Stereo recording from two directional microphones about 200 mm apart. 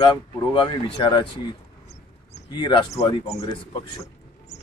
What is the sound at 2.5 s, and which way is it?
Speech, 20° left (ahead or behind).